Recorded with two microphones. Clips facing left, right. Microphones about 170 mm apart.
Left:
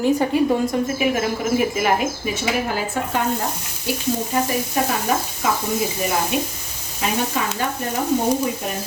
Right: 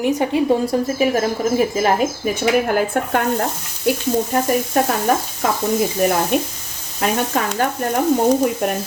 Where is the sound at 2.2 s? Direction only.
50° right (ahead or behind).